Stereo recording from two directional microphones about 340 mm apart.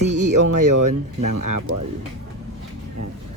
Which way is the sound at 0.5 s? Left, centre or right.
Right.